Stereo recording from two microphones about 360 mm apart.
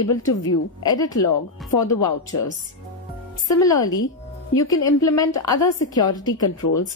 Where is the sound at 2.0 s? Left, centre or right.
Left.